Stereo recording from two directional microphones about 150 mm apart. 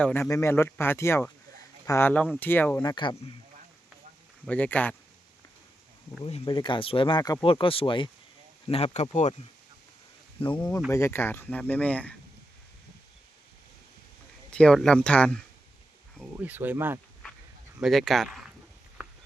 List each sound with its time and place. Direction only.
0.0 s speech: 15° left (ahead or behind)
2.8 s speech: 30° left (ahead or behind)
4.4 s speech: 10° left (ahead or behind)
6.2 s speech: 40° left (ahead or behind)
10.5 s speech: 10° left (ahead or behind)
10.9 s speech: 15° left (ahead or behind)
14.5 s speech: 5° left (ahead or behind)
16.4 s speech: 10° right (ahead or behind)
17.7 s speech: centre (ahead or behind)